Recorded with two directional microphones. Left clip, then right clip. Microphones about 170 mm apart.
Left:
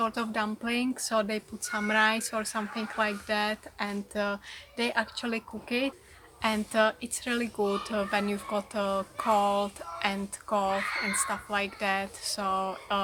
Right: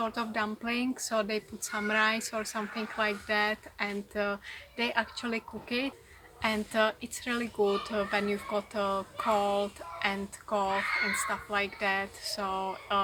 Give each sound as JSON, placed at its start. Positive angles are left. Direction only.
{"t": 0.0, "sound": "speech", "side_deg": 25}